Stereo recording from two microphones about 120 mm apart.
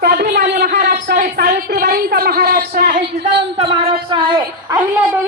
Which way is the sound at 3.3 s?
45° right (ahead or behind).